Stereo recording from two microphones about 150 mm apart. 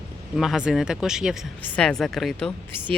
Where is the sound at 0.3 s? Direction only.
5° right (ahead or behind).